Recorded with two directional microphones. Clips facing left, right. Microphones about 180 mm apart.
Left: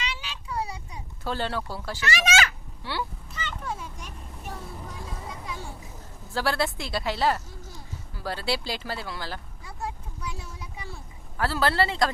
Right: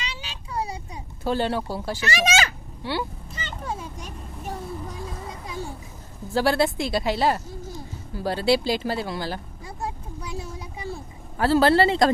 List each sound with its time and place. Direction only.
0.0 s child singing: 40° right (ahead or behind)
1.2 s speech: 15° right (ahead or behind)
2.0 s speech: 35° right (ahead or behind)
3.3 s vehicle: 35° right (ahead or behind)
6.3 s speech: 15° right (ahead or behind)
9.6 s a sound: 40° right (ahead or behind)
11.3 s speech: 25° right (ahead or behind)